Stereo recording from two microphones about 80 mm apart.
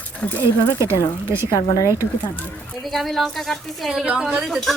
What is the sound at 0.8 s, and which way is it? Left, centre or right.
Speech, right.